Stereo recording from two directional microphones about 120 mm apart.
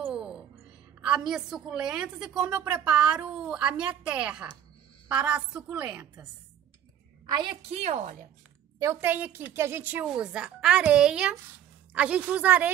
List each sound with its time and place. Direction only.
0.0 s music: 10° right (ahead or behind)
1.0 s a woman's voice: 5° right (ahead or behind)
7.7 s a woman's voice: 70° right (ahead or behind)
9.0 s a woman's voice: 15° right (ahead or behind)